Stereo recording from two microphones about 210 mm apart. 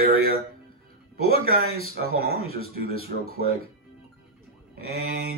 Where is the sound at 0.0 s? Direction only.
45° right (ahead or behind).